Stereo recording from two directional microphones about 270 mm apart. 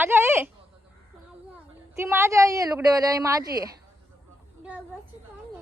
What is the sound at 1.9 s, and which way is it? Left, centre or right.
Speech, centre.